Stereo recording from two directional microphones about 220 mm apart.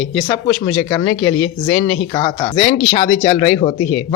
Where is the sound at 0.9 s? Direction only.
10° left (ahead or behind).